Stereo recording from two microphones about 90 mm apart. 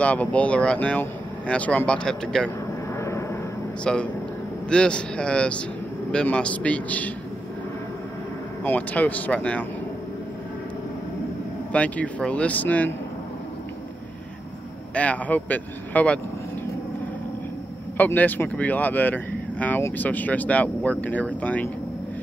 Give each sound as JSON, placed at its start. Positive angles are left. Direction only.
{"t": 0.0, "sound": "speech", "side_deg": 15}
{"t": 3.0, "sound": "vehicle", "side_deg": 30}
{"t": 3.8, "sound": "speech", "side_deg": 10}
{"t": 8.6, "sound": "speech", "side_deg": 20}
{"t": 11.7, "sound": "speech", "side_deg": 15}
{"t": 15.0, "sound": "speech", "side_deg": 15}
{"t": 17.9, "sound": "speech", "side_deg": 20}